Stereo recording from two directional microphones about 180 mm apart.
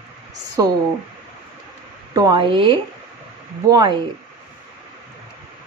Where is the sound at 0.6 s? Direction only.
20° right (ahead or behind).